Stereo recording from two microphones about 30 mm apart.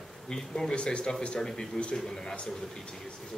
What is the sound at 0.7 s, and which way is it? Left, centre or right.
Speech, left.